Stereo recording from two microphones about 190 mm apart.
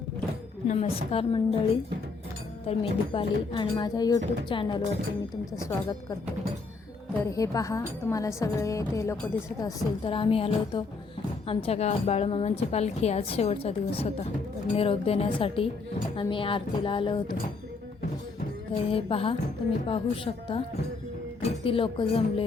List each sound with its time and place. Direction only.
0.7 s a woman's voice: 30° left (ahead or behind)
2.6 s a woman's voice: 30° left (ahead or behind)
7.3 s a woman's voice: 15° left (ahead or behind)
18.7 s a woman's voice: 30° left (ahead or behind)